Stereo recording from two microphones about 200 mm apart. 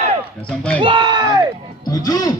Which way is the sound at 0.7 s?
25° right (ahead or behind).